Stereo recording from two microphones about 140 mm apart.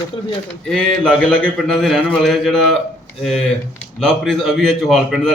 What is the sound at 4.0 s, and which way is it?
A man's voice, 5° left (ahead or behind).